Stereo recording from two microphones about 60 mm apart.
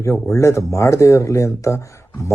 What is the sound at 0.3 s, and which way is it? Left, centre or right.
Speech, left.